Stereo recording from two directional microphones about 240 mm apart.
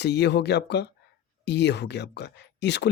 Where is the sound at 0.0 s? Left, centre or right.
Left.